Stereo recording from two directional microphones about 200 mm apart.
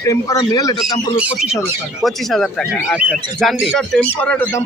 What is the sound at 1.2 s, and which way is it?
Speech, 5° right (ahead or behind).